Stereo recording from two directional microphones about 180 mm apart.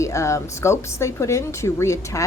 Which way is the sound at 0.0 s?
15° left (ahead or behind).